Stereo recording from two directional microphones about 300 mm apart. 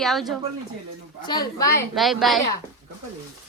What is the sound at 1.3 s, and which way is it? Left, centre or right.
Speech, centre.